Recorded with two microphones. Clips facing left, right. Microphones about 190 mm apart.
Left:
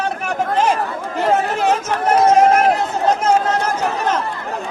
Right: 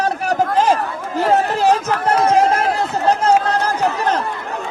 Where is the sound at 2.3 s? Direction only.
30° right (ahead or behind).